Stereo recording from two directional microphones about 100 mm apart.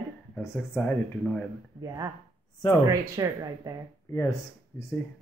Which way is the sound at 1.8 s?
40° right (ahead or behind).